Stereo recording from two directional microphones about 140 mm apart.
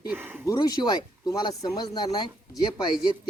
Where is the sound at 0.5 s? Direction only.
30° left (ahead or behind).